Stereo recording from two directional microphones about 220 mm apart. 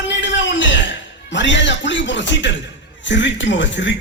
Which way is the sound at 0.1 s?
55° left (ahead or behind).